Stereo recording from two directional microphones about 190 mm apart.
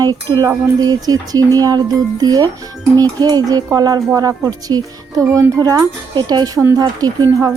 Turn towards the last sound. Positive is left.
turn(degrees=-20)  # may be behind; listen again after turning